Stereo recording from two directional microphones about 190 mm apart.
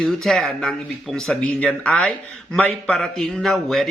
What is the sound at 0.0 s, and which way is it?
A man's voice, centre (ahead or behind).